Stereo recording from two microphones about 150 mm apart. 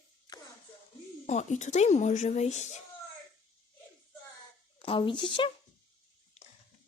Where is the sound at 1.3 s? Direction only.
50° left (ahead or behind).